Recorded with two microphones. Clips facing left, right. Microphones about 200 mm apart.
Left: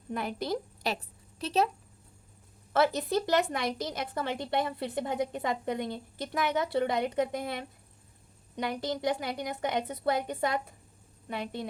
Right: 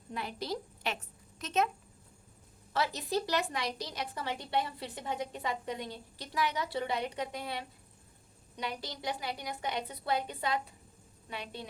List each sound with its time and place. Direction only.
0.1 s a woman's voice: 50° left (ahead or behind); by 1.7 s 35° left (ahead or behind)
2.7 s a woman's voice: 55° left (ahead or behind)